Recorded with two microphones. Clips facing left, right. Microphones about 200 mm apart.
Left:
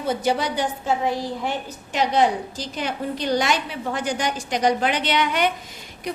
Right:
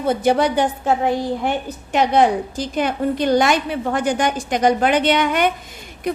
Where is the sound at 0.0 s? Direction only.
55° right (ahead or behind).